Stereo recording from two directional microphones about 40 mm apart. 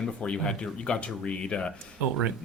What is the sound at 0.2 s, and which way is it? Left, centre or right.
A man's voice, left.